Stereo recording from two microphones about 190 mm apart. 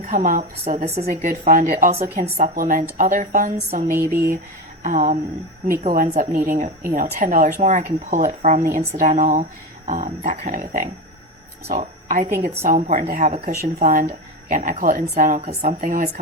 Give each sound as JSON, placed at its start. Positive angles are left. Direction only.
{"t": 0.0, "sound": "a woman's voice", "side_deg": -40}
{"t": 3.9, "sound": "speech", "side_deg": -10}
{"t": 4.8, "sound": "speech", "side_deg": -40}